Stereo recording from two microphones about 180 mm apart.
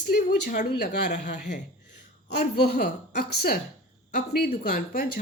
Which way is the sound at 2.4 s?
60° left (ahead or behind).